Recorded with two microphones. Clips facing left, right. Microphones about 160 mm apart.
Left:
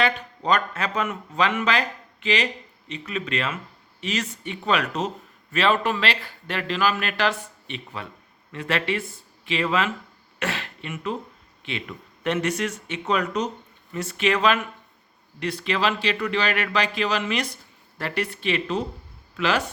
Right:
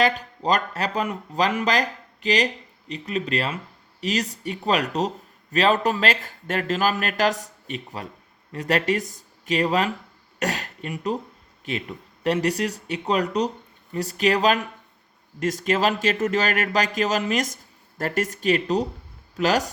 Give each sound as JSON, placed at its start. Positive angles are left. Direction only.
{"t": 0.2, "sound": "speech", "side_deg": -35}